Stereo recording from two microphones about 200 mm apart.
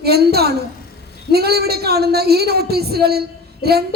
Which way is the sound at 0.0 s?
50° right (ahead or behind).